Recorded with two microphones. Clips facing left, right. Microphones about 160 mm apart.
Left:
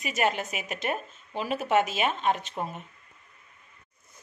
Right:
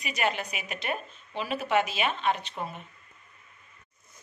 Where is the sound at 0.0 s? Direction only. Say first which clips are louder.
Left 2 dB; 45° left (ahead or behind).